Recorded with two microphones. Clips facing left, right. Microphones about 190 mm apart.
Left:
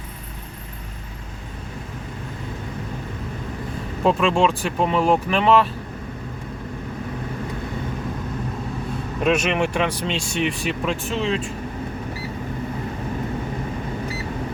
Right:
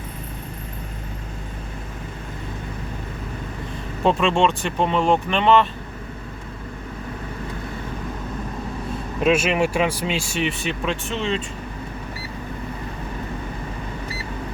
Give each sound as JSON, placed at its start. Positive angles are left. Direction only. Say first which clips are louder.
{"t": 4.0, "sound": "speech", "louder": "even", "side_deg": 0}
{"t": 9.2, "sound": "speech", "louder": "right 1 dB", "side_deg": -5}